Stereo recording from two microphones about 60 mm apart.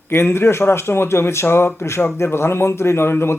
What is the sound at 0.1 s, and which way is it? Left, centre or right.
Speech, left.